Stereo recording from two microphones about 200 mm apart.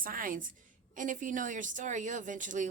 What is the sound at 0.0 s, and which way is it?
A woman's voice, 45° right (ahead or behind).